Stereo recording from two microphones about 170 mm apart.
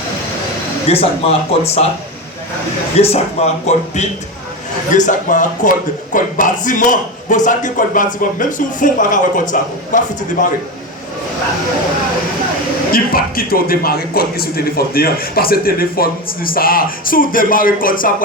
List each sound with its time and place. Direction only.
0.9 s speech: 35° left (ahead or behind)
3.0 s a man's voice: 40° left (ahead or behind)
12.9 s a man's voice: 60° left (ahead or behind)